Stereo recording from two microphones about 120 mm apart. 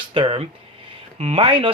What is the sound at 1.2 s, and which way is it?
Speech, 65° right (ahead or behind).